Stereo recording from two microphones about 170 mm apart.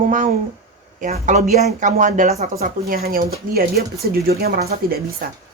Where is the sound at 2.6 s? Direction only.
60° right (ahead or behind).